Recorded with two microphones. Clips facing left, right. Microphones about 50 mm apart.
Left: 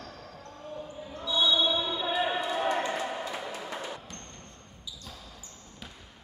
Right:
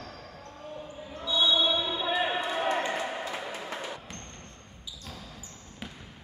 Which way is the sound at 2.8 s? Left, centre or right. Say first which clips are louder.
Even; centre.